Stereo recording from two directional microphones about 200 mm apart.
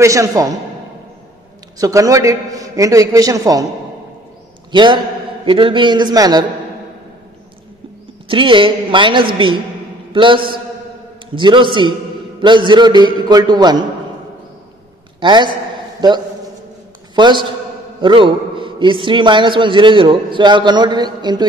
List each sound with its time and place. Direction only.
0.0 s a man's voice: 15° right (ahead or behind)
1.8 s a man's voice: 15° right (ahead or behind)
4.7 s a man's voice: 25° right (ahead or behind)
8.3 s a man's voice: 25° right (ahead or behind)
15.1 s a man's voice: 25° right (ahead or behind)
17.1 s a man's voice: 20° right (ahead or behind)